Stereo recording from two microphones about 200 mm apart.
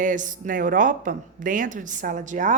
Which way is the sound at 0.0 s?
40° right (ahead or behind).